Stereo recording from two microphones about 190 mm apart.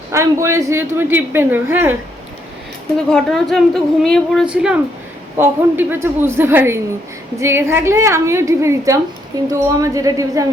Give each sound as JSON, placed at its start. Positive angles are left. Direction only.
{"t": 0.1, "sound": "a woman's voice", "side_deg": -15}
{"t": 3.1, "sound": "a woman's voice", "side_deg": 0}